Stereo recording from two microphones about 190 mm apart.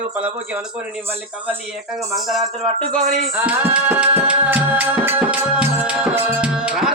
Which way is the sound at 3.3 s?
10° right (ahead or behind).